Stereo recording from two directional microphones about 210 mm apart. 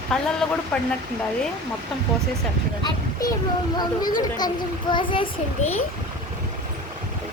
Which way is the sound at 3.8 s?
20° left (ahead or behind).